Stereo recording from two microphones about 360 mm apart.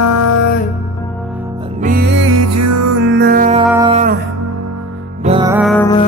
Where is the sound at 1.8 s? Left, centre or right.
Right.